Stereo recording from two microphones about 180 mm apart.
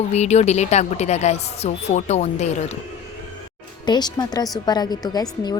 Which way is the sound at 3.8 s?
25° left (ahead or behind).